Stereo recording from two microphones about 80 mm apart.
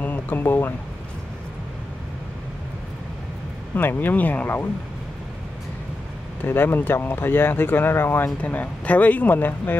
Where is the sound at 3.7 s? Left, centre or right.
Left.